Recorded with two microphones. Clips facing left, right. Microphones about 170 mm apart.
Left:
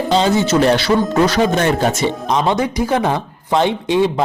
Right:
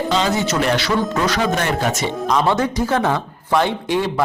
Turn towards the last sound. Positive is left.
turn(degrees=20)  # may be behind; listen again after turning